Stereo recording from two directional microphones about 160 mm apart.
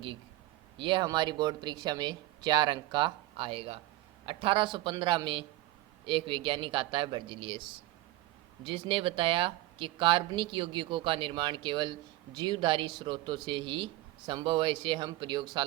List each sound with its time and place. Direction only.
0.8 s speech: 30° right (ahead or behind)